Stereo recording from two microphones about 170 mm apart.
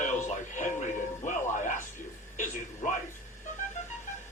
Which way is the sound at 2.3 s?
50° left (ahead or behind).